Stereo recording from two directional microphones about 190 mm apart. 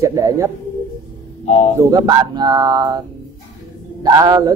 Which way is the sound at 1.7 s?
20° right (ahead or behind).